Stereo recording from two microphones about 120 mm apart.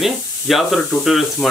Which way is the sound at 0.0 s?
Centre (ahead or behind).